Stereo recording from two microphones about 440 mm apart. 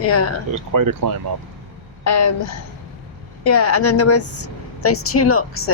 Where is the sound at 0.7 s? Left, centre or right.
Right.